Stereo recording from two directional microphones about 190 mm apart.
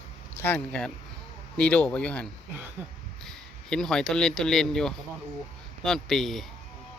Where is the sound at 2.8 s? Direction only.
10° right (ahead or behind).